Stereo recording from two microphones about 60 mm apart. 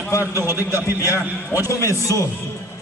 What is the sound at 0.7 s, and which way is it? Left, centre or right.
Speech, left.